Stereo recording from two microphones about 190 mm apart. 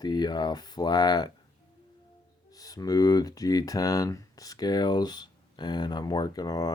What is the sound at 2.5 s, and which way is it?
Speech, 20° left (ahead or behind).